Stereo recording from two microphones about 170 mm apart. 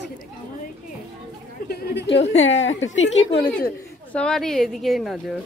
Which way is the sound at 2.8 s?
90° left.